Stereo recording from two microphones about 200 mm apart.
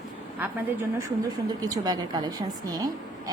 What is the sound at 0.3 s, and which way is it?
A woman's voice, 10° right (ahead or behind).